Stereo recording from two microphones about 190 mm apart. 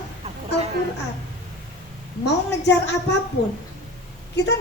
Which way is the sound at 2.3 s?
65° left (ahead or behind).